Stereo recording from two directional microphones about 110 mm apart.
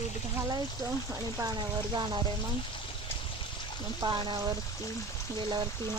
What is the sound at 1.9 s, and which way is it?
Speech, 40° right (ahead or behind).